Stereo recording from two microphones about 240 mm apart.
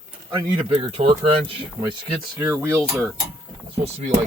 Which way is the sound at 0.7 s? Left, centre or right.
Right.